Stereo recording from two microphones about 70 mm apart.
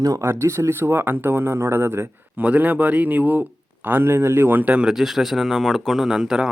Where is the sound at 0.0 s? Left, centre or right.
Right.